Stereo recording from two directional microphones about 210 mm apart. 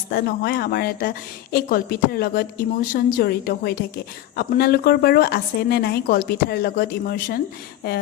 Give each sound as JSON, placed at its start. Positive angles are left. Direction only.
{"t": 0.1, "sound": "a woman's voice", "side_deg": 50}